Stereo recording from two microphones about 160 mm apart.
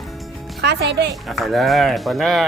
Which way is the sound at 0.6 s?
90° right.